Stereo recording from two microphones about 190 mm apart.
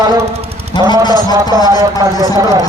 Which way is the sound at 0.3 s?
30° right (ahead or behind).